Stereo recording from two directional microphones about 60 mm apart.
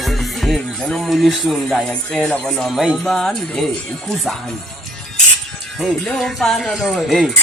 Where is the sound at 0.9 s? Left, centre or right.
Centre.